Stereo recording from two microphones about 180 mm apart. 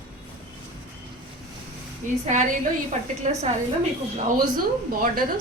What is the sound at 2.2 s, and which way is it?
Speech, 45° right (ahead or behind).